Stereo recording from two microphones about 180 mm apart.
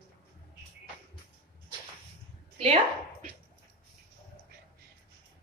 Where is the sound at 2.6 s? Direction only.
30° right (ahead or behind).